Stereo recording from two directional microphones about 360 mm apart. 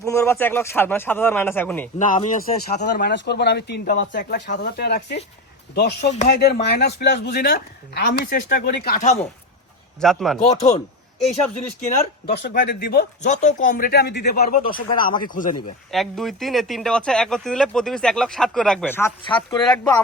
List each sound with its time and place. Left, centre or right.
0.0 s speech: centre
2.0 s a man's voice: centre
10.0 s speech: centre
10.4 s a man's voice: centre
12.2 s a man's voice: left
15.9 s speech: centre